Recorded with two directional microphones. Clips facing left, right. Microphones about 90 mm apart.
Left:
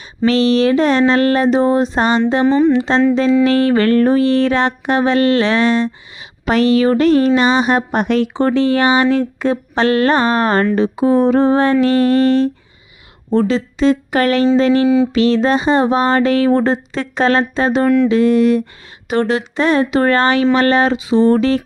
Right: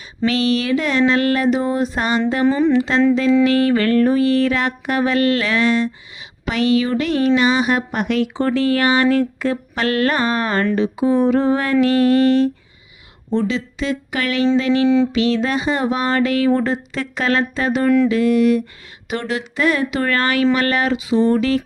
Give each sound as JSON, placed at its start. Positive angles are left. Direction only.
{"t": 0.3, "sound": "a woman's voice", "side_deg": 35}
{"t": 2.5, "sound": "a sound", "side_deg": 0}
{"t": 2.7, "sound": "a woman's voice", "side_deg": 30}
{"t": 14.8, "sound": "music", "side_deg": 10}
{"t": 15.1, "sound": "a woman's voice", "side_deg": 40}
{"t": 17.8, "sound": "a sound", "side_deg": 0}
{"t": 18.1, "sound": "a woman's voice", "side_deg": 30}